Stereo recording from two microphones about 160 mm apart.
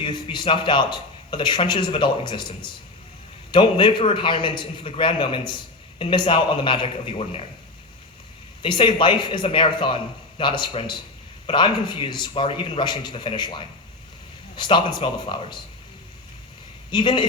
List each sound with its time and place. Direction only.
0.0 s a man's voice: 30° left (ahead or behind)
3.5 s a man's voice: 30° left (ahead or behind)
8.6 s a man's voice: 30° left (ahead or behind)
16.9 s a man's voice: 30° left (ahead or behind)